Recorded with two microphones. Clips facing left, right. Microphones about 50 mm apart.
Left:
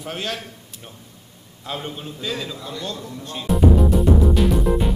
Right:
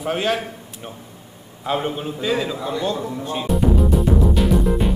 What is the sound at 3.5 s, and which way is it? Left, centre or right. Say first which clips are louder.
Music: left 2 dB; centre.